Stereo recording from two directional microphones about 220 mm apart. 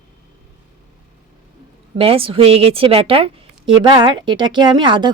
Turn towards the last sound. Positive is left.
turn(degrees=-20)  # may be behind; listen again after turning